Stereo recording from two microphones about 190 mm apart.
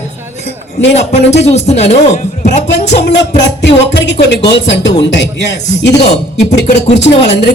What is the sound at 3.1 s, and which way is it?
Speech, 65° left (ahead or behind).